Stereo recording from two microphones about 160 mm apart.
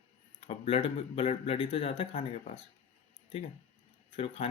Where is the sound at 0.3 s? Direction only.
35° left (ahead or behind).